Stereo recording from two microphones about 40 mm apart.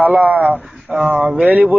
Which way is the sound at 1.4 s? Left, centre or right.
Right.